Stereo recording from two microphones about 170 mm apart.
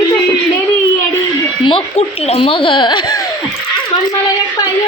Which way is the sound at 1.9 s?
35° left (ahead or behind).